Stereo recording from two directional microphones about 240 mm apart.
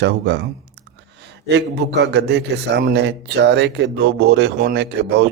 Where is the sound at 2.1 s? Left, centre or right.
Right.